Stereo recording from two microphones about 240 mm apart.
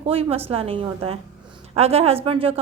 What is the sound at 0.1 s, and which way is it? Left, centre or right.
Speech, right.